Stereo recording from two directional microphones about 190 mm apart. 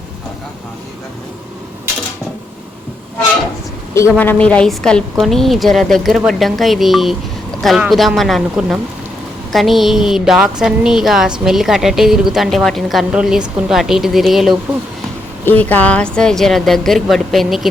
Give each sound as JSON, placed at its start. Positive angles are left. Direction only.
{"t": 4.2, "sound": "a woman's voice", "side_deg": 10}
{"t": 15.4, "sound": "a woman's voice", "side_deg": 10}